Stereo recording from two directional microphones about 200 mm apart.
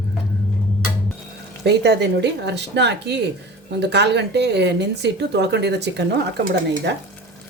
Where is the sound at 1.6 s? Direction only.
55° right (ahead or behind).